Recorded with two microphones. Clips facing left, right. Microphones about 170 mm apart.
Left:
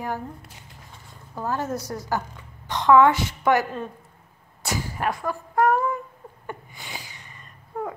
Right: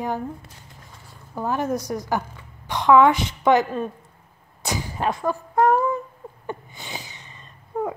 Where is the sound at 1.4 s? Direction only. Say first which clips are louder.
Right 3 dB; 15° right (ahead or behind).